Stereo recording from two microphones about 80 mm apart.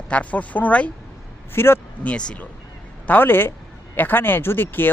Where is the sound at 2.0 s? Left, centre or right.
Centre.